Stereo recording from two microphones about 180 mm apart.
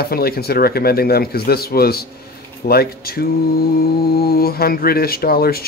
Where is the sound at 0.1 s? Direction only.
60° left (ahead or behind).